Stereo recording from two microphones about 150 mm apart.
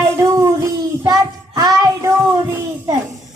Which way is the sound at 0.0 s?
20° right (ahead or behind).